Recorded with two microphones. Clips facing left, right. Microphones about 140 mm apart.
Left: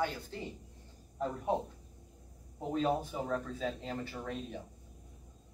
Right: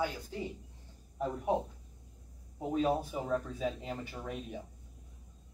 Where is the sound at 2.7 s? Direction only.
10° right (ahead or behind).